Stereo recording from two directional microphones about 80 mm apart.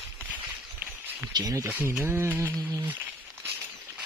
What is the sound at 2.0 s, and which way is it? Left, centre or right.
Speech, right.